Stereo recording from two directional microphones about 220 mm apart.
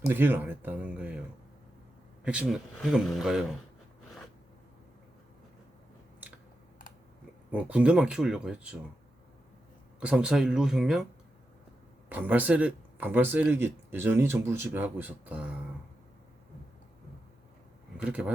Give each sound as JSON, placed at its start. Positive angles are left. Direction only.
{"t": 0.1, "sound": "speech", "side_deg": -10}
{"t": 2.2, "sound": "speech", "side_deg": -5}
{"t": 7.5, "sound": "speech", "side_deg": -5}
{"t": 10.0, "sound": "speech", "side_deg": -5}
{"t": 12.0, "sound": "speech", "side_deg": -10}
{"t": 17.9, "sound": "speech", "side_deg": -5}